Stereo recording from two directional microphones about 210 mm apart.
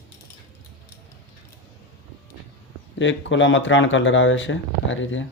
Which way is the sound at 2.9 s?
60° left (ahead or behind).